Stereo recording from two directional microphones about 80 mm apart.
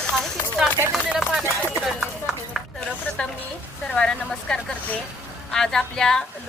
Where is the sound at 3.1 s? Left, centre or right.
Centre.